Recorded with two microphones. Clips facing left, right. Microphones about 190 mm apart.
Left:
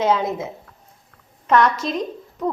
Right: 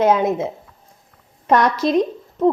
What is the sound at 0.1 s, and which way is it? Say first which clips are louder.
Speech: right 4 dB; 20° right (ahead or behind).